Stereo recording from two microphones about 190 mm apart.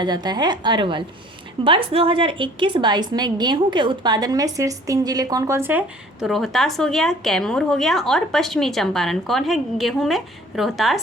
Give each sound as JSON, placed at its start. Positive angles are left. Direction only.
{"t": 0.0, "sound": "a woman's voice", "side_deg": -20}